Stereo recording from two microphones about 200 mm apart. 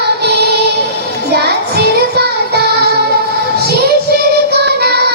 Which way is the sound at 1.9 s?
55° right (ahead or behind).